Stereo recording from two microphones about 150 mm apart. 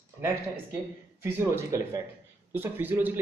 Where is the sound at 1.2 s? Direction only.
20° right (ahead or behind).